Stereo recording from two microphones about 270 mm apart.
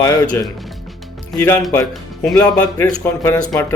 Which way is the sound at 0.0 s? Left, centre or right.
Centre.